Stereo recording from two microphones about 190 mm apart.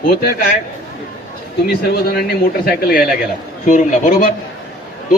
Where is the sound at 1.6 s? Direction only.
55° left (ahead or behind).